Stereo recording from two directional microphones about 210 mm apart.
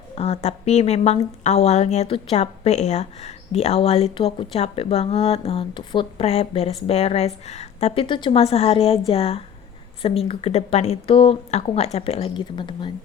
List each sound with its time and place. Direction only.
0.2 s a woman's voice: 30° left (ahead or behind)